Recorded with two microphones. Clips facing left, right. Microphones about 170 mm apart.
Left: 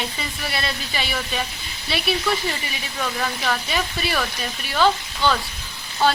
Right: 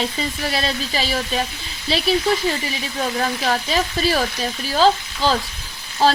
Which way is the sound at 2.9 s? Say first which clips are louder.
Right 3 dB; 35° right (ahead or behind).